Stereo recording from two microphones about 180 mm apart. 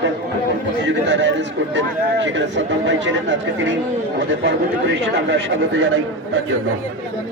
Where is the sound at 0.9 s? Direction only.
85° right.